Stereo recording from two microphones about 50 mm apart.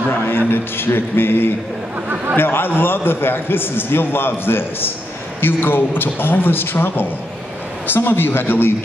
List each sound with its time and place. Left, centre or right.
0.5 s a man's voice: left